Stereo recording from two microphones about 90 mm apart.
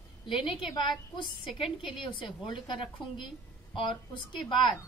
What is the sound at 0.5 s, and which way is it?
Speech, 65° left (ahead or behind).